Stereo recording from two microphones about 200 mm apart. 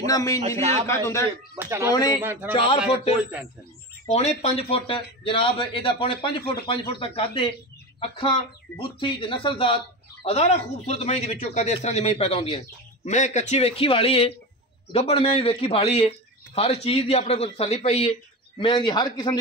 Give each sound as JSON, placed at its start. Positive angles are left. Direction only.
{"t": 0.0, "sound": "a man's voice", "side_deg": 15}
{"t": 0.6, "sound": "a man's voice", "side_deg": -30}
{"t": 0.8, "sound": "a man's voice", "side_deg": 15}
{"t": 1.6, "sound": "a man's voice", "side_deg": -15}
{"t": 1.9, "sound": "a man's voice", "side_deg": 20}
{"t": 2.8, "sound": "a man's voice", "side_deg": -10}
{"t": 4.2, "sound": "a man's voice", "side_deg": 30}